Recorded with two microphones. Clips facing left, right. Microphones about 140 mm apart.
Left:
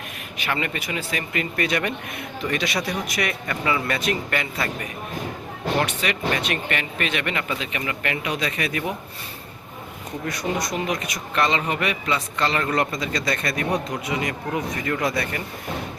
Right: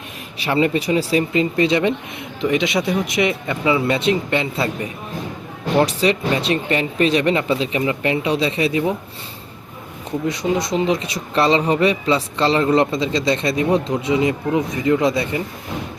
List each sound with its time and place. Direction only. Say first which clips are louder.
0.3 s speech: right 9 dB; 30° right (ahead or behind)
10.2 s speech: right 6 dB; 25° right (ahead or behind)